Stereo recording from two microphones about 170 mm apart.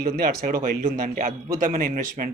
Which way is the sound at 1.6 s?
50° right (ahead or behind).